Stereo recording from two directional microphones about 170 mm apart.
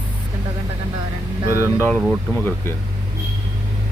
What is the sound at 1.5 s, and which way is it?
Speech, 15° right (ahead or behind).